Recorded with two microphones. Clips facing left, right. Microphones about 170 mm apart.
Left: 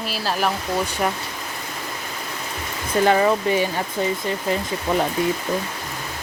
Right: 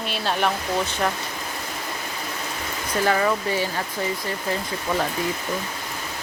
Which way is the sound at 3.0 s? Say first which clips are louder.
Left 4 dB; 25° left (ahead or behind).